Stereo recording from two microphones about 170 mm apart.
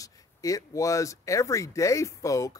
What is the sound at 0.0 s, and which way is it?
Speech, 20° left (ahead or behind).